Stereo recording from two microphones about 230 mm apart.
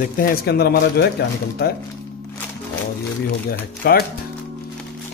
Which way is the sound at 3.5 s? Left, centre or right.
Left.